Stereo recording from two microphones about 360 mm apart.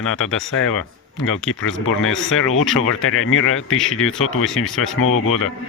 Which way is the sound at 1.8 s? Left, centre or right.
Left.